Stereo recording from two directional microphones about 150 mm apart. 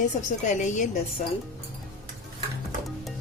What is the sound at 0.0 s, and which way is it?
Speech, 55° left (ahead or behind).